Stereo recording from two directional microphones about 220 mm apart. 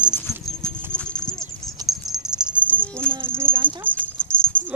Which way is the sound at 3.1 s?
10° right (ahead or behind).